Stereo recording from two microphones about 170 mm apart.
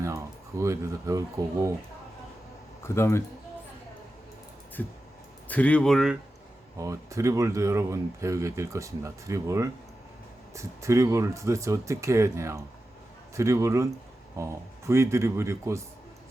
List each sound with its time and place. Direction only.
0.6 s speech: 20° right (ahead or behind)
2.8 s speech: 15° left (ahead or behind)
4.8 s speech: 10° left (ahead or behind)
6.7 s speech: 20° right (ahead or behind)